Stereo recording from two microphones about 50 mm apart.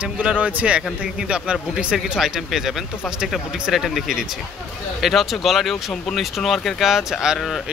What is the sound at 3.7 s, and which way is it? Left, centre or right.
Speech, centre.